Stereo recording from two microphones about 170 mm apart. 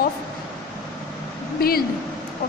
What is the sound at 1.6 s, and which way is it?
Speech, 60° left (ahead or behind).